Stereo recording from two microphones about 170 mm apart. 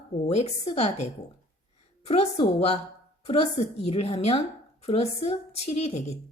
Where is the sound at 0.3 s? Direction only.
40° left (ahead or behind).